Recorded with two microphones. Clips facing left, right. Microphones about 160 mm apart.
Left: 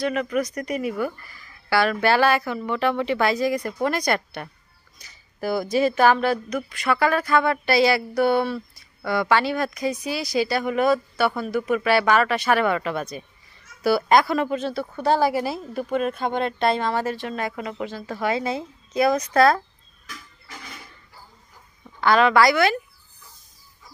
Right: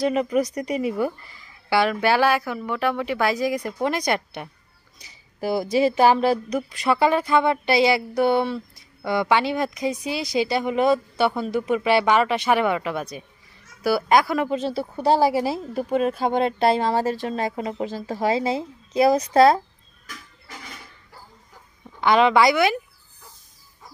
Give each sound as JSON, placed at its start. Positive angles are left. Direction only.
{"t": 0.1, "sound": "speech", "side_deg": -30}
{"t": 4.9, "sound": "a woman's voice", "side_deg": -25}
{"t": 14.5, "sound": "speech", "side_deg": -30}
{"t": 22.0, "sound": "a woman's voice", "side_deg": -20}